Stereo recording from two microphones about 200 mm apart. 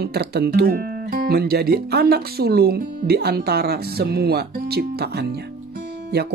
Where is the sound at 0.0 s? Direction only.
55° right (ahead or behind).